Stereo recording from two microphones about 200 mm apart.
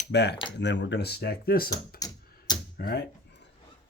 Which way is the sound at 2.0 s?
20° left (ahead or behind).